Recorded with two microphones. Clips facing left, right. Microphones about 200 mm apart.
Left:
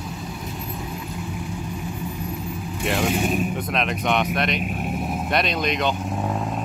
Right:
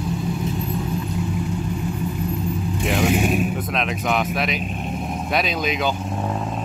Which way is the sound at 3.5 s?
Centre (ahead or behind).